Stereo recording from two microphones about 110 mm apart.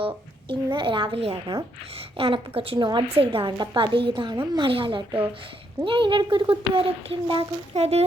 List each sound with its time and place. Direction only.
0.0 s a child's voice: 50° right (ahead or behind)
7.8 s speech: 70° right (ahead or behind)